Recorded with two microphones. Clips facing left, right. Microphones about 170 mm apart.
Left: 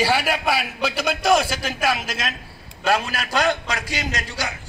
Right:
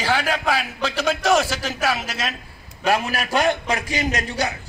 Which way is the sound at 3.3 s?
20° right (ahead or behind).